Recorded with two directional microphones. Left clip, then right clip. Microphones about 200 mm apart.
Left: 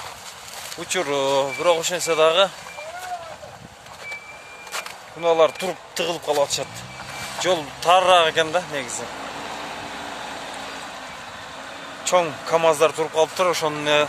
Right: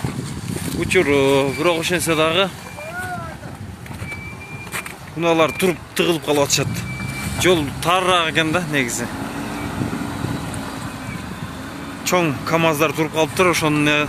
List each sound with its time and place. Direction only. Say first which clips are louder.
0.8 s speech: right 6 dB; 25° left (ahead or behind)
5.2 s speech: right 1 dB; 15° left (ahead or behind)
12.0 s speech: right 1 dB; 10° left (ahead or behind)